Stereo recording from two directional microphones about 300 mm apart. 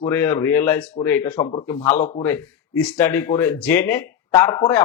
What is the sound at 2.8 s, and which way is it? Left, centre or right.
Speech, centre.